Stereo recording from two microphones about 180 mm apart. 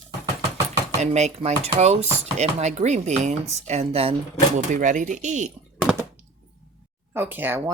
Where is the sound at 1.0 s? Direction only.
40° right (ahead or behind).